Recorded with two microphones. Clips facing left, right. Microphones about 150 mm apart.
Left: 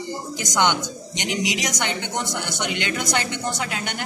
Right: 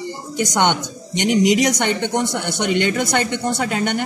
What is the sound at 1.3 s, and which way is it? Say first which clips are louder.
A woman's voice: right 10 dB; 50° right (ahead or behind).